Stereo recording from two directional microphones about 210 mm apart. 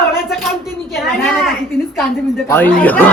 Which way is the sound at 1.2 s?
Centre (ahead or behind).